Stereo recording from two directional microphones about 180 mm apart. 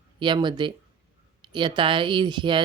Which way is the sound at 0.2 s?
25° right (ahead or behind).